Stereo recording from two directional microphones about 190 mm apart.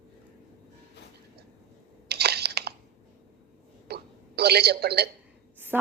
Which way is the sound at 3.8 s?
60° right (ahead or behind).